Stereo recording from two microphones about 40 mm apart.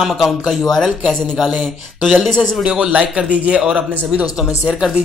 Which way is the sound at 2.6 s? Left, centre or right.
Right.